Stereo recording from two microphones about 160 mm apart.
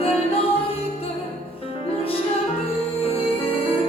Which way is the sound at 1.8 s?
35° left (ahead or behind).